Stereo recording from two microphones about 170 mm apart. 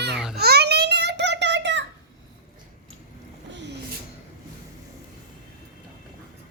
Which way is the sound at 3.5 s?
90° right.